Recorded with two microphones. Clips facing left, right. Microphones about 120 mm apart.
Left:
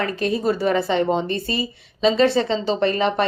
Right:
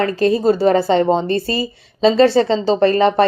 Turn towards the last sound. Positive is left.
turn(degrees=-40)  # may be behind; listen again after turning